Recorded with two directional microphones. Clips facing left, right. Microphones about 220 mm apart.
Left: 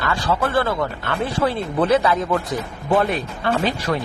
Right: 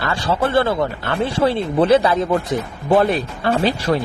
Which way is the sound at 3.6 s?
30° right (ahead or behind).